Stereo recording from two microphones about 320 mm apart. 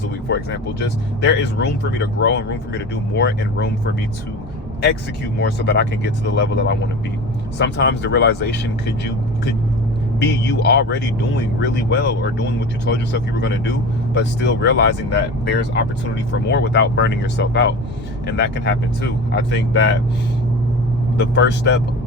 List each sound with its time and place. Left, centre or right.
0.3 s speech: left
5.4 s speech: left
10.2 s speech: left
21.2 s speech: left